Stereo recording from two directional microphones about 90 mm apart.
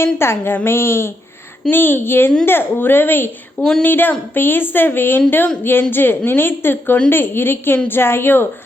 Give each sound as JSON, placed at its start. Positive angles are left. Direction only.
{"t": 0.0, "sound": "a woman's voice", "side_deg": 25}
{"t": 3.6, "sound": "speech", "side_deg": 5}
{"t": 3.8, "sound": "a woman's voice", "side_deg": 20}